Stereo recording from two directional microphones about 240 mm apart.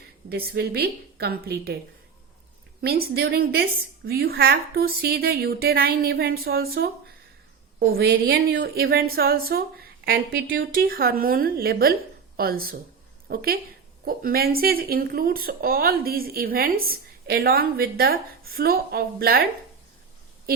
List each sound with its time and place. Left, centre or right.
0.3 s speech: right
2.8 s a woman's voice: right